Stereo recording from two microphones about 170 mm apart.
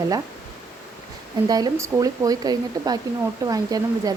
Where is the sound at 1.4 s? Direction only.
20° right (ahead or behind).